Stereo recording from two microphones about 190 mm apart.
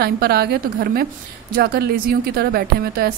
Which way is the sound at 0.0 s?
55° right (ahead or behind).